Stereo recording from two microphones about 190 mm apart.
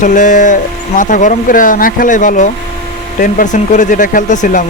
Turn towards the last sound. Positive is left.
turn(degrees=40)  # may be behind; listen again after turning